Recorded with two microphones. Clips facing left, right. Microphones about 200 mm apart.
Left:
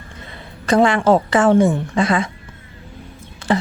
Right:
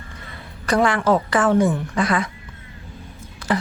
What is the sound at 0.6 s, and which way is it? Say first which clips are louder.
Speech: left 4 dB; 25° left (ahead or behind).